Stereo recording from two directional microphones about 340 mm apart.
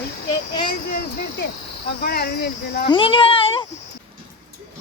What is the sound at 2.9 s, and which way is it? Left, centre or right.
Speech, centre.